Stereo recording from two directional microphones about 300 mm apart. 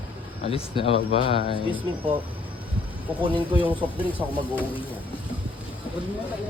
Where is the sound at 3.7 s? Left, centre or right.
Centre.